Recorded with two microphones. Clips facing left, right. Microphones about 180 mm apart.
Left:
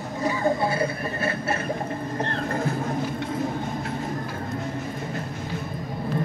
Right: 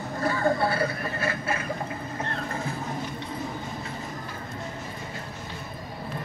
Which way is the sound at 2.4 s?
55° left (ahead or behind).